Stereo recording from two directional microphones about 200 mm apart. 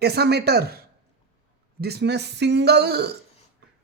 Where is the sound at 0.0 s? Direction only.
55° right (ahead or behind).